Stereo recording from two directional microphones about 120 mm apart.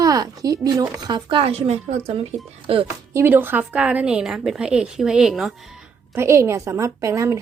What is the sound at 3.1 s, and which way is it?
A woman's voice, 20° right (ahead or behind).